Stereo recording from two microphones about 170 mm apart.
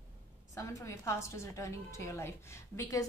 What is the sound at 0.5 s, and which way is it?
A woman's voice, 20° left (ahead or behind).